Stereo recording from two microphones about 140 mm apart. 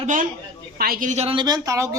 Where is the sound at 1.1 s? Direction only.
50° right (ahead or behind).